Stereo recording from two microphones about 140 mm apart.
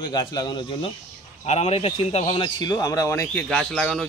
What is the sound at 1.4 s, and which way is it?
A man's voice, 50° left (ahead or behind).